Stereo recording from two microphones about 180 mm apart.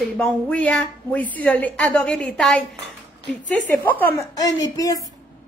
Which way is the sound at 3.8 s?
10° left (ahead or behind).